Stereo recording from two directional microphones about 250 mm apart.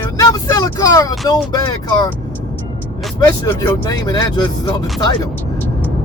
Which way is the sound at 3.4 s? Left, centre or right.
Centre.